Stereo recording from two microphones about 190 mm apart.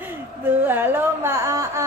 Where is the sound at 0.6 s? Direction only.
10° right (ahead or behind).